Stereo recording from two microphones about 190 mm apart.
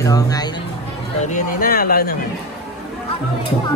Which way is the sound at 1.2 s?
45° left (ahead or behind).